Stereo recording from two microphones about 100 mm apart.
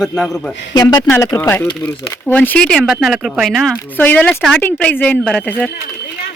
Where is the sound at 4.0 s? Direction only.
15° left (ahead or behind).